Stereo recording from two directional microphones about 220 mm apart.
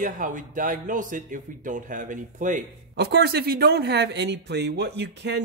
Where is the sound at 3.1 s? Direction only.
45° right (ahead or behind).